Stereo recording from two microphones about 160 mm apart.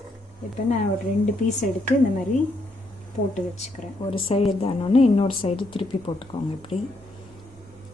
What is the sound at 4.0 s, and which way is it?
Speech, 35° left (ahead or behind).